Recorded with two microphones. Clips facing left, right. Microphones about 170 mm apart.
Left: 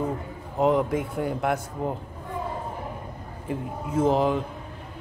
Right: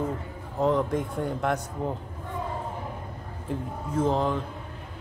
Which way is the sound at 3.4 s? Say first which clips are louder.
Left 2 dB; 10° left (ahead or behind).